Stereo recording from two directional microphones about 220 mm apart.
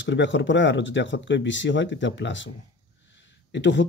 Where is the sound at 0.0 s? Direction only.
55° left (ahead or behind).